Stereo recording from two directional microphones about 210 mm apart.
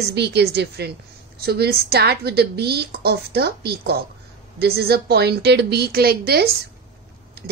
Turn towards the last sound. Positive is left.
turn(degrees=-45)  # may be behind; listen again after turning